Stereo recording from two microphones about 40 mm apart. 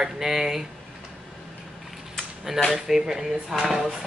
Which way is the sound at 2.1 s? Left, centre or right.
Centre.